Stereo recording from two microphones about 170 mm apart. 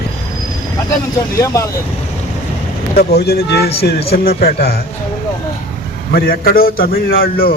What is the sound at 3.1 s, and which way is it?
A man's voice, 70° left (ahead or behind).